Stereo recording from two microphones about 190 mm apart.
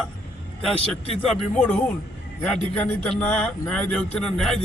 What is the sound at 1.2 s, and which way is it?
A man's voice, 5° left (ahead or behind).